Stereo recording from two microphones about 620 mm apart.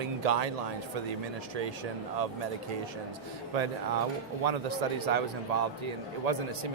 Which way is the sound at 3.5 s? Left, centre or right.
Right.